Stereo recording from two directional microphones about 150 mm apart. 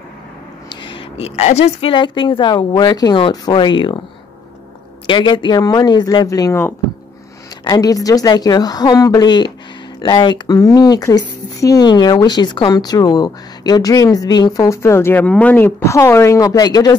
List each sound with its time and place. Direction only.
0.7 s speech: 35° left (ahead or behind)
5.0 s speech: 30° left (ahead or behind)